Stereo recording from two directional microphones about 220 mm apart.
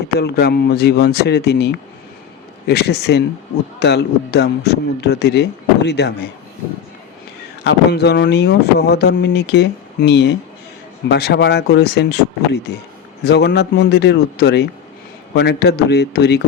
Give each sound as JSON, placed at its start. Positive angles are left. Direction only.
{"t": 0.2, "sound": "speech", "side_deg": 45}
{"t": 7.6, "sound": "speech", "side_deg": 50}